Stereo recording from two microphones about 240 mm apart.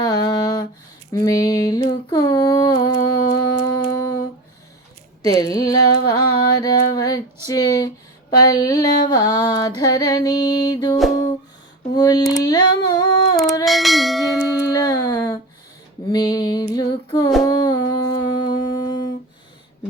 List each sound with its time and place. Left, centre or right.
0.0 s a sound: centre
7.4 s music: centre
11.9 s music: centre
12.4 s a sound: centre
13.7 s bell: centre
14.3 s music: centre
16.0 s female singing: centre
17.4 s humming: centre